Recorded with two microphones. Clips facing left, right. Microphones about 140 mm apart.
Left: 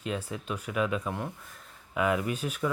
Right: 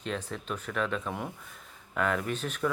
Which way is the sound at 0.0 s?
5° left (ahead or behind).